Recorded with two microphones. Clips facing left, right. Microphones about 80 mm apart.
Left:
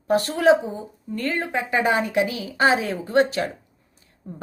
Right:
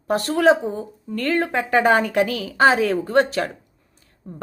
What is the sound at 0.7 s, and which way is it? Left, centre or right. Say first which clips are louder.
A woman's voice: right 3 dB; right.